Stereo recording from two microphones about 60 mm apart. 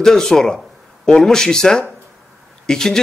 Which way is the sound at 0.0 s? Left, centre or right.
Centre.